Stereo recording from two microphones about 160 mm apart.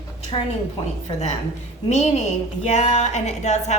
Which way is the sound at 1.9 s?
45° left (ahead or behind).